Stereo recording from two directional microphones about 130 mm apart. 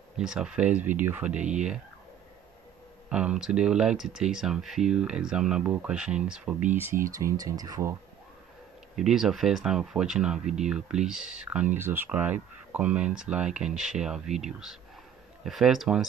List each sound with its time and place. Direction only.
0.2 s speech: 5° right (ahead or behind)
3.1 s speech: 10° right (ahead or behind)
7.1 s speech: 25° right (ahead or behind)
8.9 s speech: 5° right (ahead or behind)